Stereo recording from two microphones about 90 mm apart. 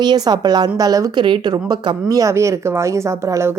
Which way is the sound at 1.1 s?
60° right (ahead or behind).